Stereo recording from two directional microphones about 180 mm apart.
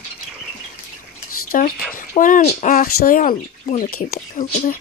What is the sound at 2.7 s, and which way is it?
Speech, 50° left (ahead or behind).